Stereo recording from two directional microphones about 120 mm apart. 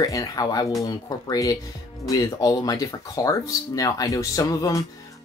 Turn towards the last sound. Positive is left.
turn(degrees=30)  # may be behind; listen again after turning